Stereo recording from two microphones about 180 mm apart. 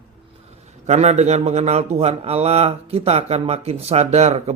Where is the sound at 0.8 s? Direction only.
40° right (ahead or behind).